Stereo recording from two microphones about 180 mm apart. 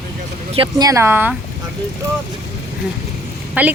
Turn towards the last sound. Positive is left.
turn(degrees=-10)  # may be behind; listen again after turning